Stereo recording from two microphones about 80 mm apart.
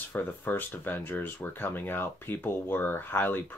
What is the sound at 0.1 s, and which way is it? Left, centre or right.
Speech, left.